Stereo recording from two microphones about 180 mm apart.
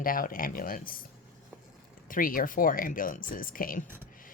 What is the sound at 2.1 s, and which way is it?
Speech, 50° left (ahead or behind).